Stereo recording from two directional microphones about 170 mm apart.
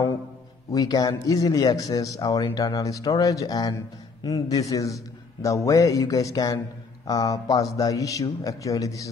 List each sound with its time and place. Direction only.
0.7 s a man's voice: 20° left (ahead or behind)